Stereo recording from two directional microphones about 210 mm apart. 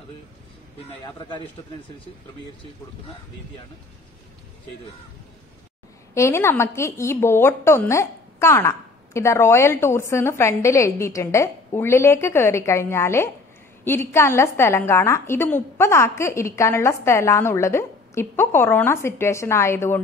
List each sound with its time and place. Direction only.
0.7 s a man's voice: 20° left (ahead or behind)
6.1 s a woman's voice: 10° left (ahead or behind)